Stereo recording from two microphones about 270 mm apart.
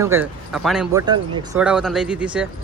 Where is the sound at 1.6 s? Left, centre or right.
Centre.